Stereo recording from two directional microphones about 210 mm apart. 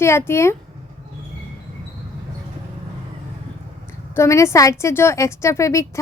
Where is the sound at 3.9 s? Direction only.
15° left (ahead or behind).